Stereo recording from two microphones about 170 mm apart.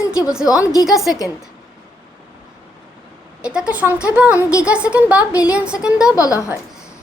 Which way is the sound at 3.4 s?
5° right (ahead or behind).